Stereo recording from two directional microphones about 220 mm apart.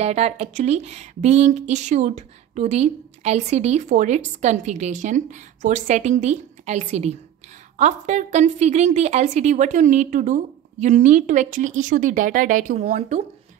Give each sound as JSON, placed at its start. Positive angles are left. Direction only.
{"t": 0.0, "sound": "a woman's voice", "side_deg": -30}